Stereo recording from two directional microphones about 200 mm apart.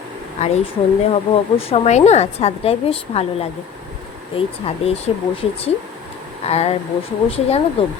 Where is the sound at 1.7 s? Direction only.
35° left (ahead or behind).